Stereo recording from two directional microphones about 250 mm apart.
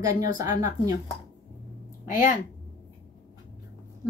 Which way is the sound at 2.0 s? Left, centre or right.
Left.